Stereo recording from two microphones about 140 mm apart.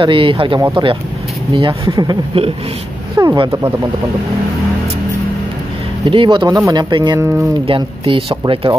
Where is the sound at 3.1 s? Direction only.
25° right (ahead or behind).